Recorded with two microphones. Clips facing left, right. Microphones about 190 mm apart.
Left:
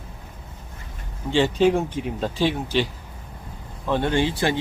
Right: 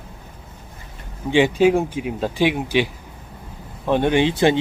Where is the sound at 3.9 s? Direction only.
15° right (ahead or behind).